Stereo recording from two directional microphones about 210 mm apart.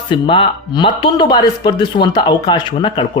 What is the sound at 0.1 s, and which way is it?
Speech, 25° left (ahead or behind).